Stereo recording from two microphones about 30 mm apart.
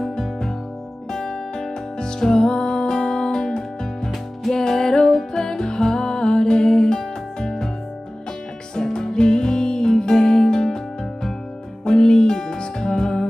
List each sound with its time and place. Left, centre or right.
1.1 s music: left
8.7 s music: left
11.8 s music: left